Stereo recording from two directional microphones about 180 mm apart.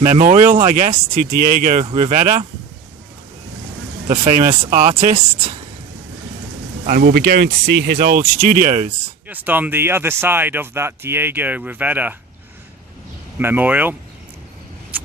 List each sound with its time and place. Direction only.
0.0 s speech: 45° right (ahead or behind)
4.1 s speech: 50° right (ahead or behind)
6.8 s speech: 55° right (ahead or behind)
9.2 s speech: 10° right (ahead or behind)
13.4 s speech: 10° right (ahead or behind)